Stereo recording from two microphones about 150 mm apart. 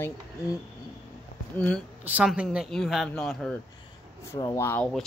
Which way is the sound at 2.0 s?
10° right (ahead or behind).